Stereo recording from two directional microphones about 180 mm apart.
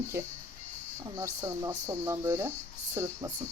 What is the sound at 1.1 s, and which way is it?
Speech, 20° right (ahead or behind).